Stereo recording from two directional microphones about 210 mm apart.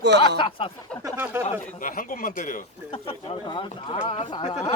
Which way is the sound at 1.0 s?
10° right (ahead or behind).